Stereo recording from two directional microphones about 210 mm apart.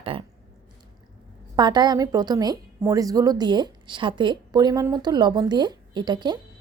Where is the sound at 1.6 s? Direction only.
20° right (ahead or behind).